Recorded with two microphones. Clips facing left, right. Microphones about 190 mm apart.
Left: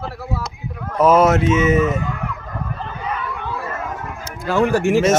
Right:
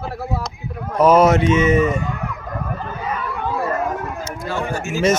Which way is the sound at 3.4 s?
40° right (ahead or behind).